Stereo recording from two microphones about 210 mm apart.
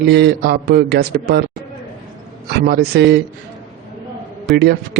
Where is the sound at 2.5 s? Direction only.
50° right (ahead or behind).